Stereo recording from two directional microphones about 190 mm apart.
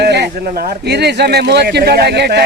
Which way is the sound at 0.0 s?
60° right (ahead or behind).